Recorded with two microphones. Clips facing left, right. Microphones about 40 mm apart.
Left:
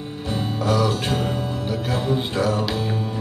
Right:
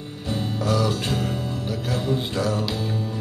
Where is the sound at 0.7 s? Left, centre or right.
Centre.